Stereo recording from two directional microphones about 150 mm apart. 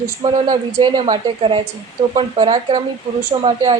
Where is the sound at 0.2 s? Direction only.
30° right (ahead or behind).